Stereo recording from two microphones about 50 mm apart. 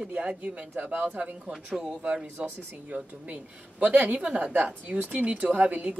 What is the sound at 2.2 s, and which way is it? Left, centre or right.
Speech, right.